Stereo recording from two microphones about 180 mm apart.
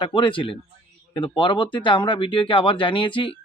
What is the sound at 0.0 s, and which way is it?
Speech, 25° left (ahead or behind).